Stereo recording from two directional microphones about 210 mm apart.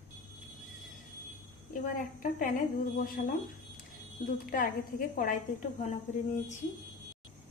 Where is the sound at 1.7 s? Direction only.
40° left (ahead or behind).